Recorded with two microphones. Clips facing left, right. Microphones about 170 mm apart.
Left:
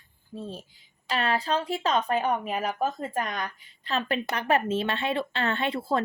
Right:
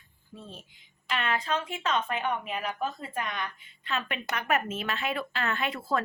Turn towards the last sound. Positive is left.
turn(degrees=30)  # may be behind; listen again after turning